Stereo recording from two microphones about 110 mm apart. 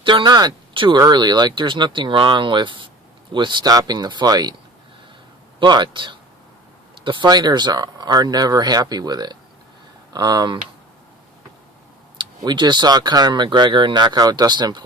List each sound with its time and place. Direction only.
0.0 s speech: 45° right (ahead or behind)
5.5 s speech: 45° right (ahead or behind)
12.4 s speech: 40° right (ahead or behind)